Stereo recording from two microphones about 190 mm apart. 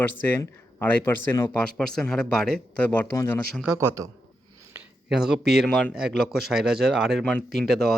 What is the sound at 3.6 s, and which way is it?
Speech, 15° right (ahead or behind).